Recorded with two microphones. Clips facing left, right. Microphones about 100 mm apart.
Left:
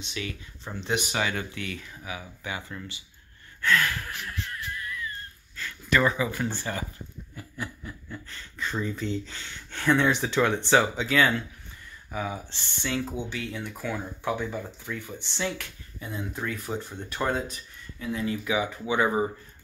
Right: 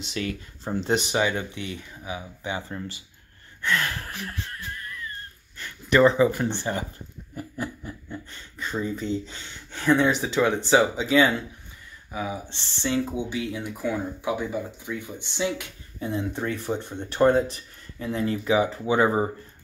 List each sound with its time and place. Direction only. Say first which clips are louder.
0.1 s speech: right 6 dB; 45° right (ahead or behind)
0.7 s speech: right 5 dB; 30° right (ahead or behind)
3.6 s gasp: left 1 dB; 30° right (ahead or behind)
5.6 s speech: right 6 dB; 25° right (ahead or behind)
7.3 s snicker: right 5 dB; 30° right (ahead or behind)
8.4 s speech: right 1 dB; 10° right (ahead or behind)
12.4 s speech: right 4 dB; 30° right (ahead or behind)
13.1 s speech: right 4 dB; 15° right (ahead or behind)
16.0 s speech: right 6 dB; 30° right (ahead or behind)
17.9 s speech: right 3 dB; 35° right (ahead or behind)